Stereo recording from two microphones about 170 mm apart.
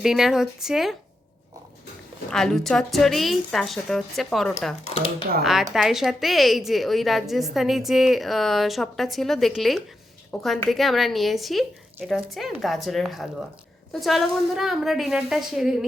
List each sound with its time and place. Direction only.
0.0 s a woman's voice: 5° right (ahead or behind)
2.3 s a woman's voice: 5° left (ahead or behind)